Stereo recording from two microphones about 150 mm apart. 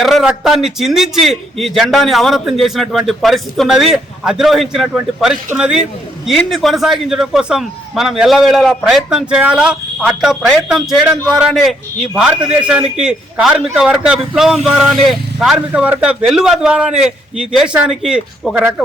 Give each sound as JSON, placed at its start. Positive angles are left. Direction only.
{"t": 0.0, "sound": "a man's voice", "side_deg": 0}